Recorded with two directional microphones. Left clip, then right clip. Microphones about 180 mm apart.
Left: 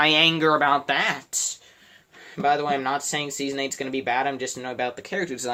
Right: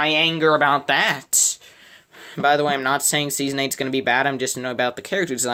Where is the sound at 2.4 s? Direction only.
60° right (ahead or behind).